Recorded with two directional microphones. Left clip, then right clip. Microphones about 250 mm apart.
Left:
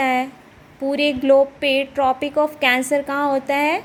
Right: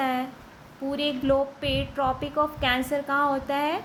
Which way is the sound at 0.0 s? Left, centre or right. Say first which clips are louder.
Left 8 dB; left.